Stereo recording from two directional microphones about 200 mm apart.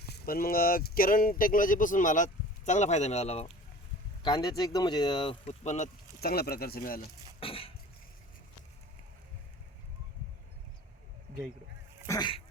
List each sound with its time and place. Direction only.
0.0 s speech: 50° left (ahead or behind); by 3.4 s 30° left (ahead or behind)
4.2 s speech: 20° left (ahead or behind)
6.1 s speech: 50° left (ahead or behind)
7.3 s cough: 30° left (ahead or behind)
12.0 s speech: 20° left (ahead or behind)